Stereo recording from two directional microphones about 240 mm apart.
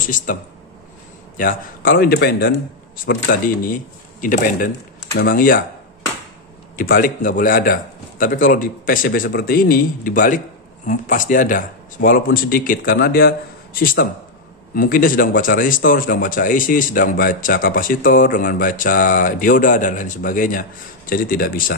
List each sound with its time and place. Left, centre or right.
0.0 s speech: left
6.8 s speech: left